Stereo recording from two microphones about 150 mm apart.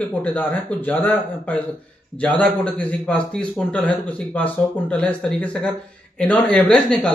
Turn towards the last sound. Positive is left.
turn(degrees=5)  # may be behind; listen again after turning